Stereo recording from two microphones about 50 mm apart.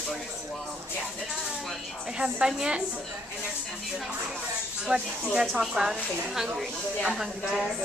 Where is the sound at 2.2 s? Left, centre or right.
Centre.